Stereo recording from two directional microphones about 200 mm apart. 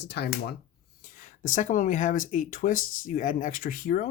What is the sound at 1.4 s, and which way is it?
Speech, 40° left (ahead or behind).